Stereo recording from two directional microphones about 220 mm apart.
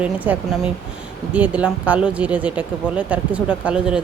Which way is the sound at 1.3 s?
5° right (ahead or behind).